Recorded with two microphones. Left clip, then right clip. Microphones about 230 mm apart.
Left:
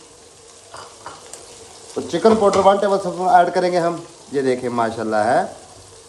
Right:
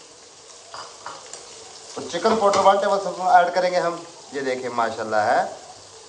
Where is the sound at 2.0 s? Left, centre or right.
Left.